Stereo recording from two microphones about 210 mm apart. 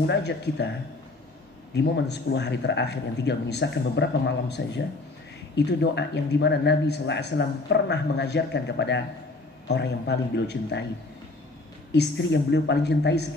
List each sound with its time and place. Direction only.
0.0 s a man's voice: 55° left (ahead or behind)
1.8 s a man's voice: 55° left (ahead or behind)
11.9 s a man's voice: 55° left (ahead or behind)